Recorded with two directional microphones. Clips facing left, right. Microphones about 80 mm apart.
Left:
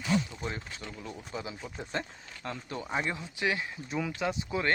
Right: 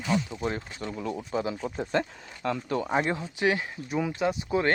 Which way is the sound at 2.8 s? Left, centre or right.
Right.